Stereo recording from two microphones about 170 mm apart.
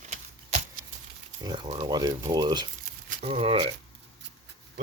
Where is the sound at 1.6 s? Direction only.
30° right (ahead or behind).